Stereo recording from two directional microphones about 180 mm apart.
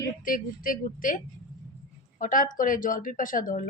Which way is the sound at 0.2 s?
50° left (ahead or behind).